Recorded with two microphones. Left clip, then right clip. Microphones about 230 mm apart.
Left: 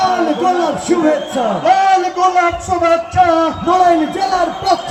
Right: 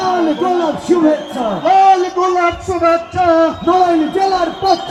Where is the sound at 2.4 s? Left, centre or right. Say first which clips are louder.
Left 1 dB; left.